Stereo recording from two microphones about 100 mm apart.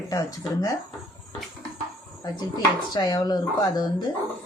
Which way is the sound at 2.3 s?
45° left (ahead or behind).